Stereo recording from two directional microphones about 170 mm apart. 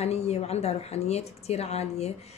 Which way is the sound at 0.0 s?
40° left (ahead or behind).